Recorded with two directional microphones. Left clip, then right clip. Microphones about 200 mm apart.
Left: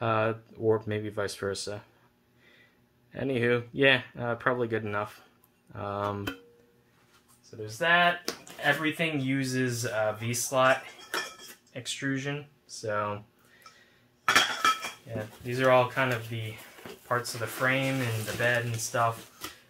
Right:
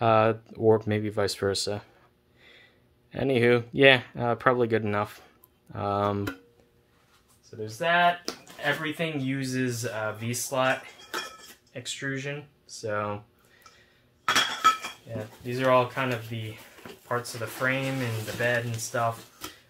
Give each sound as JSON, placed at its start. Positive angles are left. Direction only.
{"t": 0.0, "sound": "speech", "side_deg": -50}
{"t": 3.1, "sound": "speech", "side_deg": -50}
{"t": 7.6, "sound": "speech", "side_deg": -25}
{"t": 8.3, "sound": "speech", "side_deg": -10}
{"t": 11.7, "sound": "speech", "side_deg": -20}
{"t": 15.0, "sound": "speech", "side_deg": -15}